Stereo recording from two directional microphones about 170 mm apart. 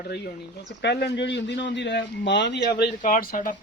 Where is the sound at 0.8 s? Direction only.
80° left.